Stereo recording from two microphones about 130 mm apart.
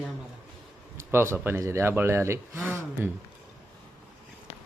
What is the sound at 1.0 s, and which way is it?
Speech, 20° right (ahead or behind).